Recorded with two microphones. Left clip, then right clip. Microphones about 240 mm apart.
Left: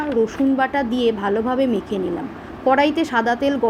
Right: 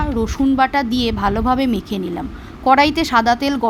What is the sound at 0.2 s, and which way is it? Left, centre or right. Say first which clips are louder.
Speech: right 2 dB; right.